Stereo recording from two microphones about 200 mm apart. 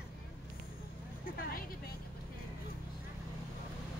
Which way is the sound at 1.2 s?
45° left (ahead or behind).